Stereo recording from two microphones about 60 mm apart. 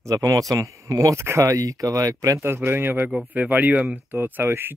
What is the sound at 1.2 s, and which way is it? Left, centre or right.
Speech, right.